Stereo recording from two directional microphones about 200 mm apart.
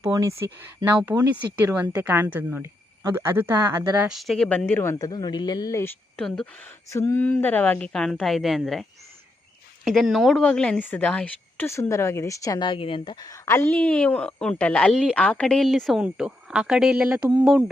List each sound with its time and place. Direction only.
0.0 s speech: 15° right (ahead or behind)
4.1 s speech: centre (ahead or behind)
17.2 s speech: 20° right (ahead or behind)